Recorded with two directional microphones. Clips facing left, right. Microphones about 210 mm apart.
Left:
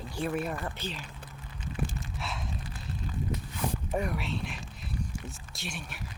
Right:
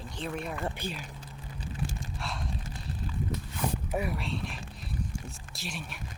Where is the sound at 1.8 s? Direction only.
55° left (ahead or behind).